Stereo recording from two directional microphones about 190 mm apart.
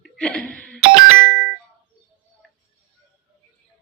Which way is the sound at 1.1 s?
90° right.